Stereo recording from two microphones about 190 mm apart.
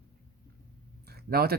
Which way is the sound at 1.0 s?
55° right (ahead or behind).